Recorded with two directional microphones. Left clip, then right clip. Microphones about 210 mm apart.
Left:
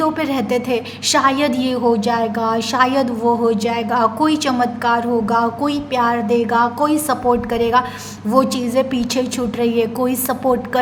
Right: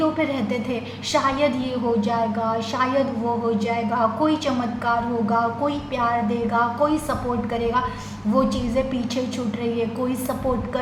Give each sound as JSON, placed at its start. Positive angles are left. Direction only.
{"t": 0.0, "sound": "a woman's voice", "side_deg": 45}